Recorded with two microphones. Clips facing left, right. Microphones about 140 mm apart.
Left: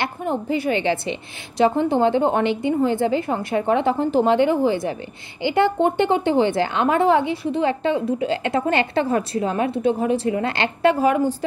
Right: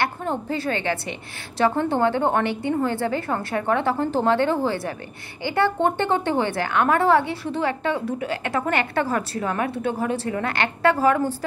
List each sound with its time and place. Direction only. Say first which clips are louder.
0.0 s a woman's voice: left 1 dB; 15° left (ahead or behind)